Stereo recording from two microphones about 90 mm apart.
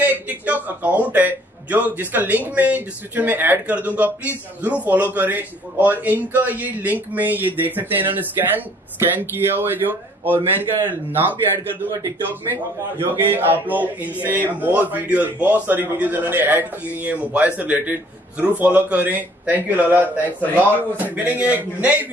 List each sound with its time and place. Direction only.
0.0 s a man's voice: 20° right (ahead or behind)
13.2 s speech: 20° right (ahead or behind)